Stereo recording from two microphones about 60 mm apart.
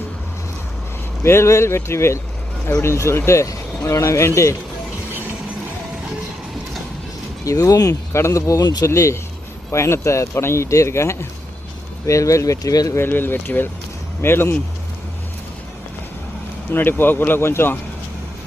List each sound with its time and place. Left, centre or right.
1.2 s speech: left
7.4 s speech: left
8.3 s speech: left
8.9 s speech: left
12.0 s speech: left
12.9 s speech: left
16.7 s speech: left